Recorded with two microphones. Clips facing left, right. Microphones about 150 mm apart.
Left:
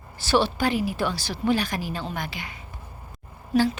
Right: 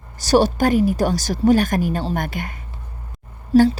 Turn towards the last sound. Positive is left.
turn(degrees=-35)  # may be behind; listen again after turning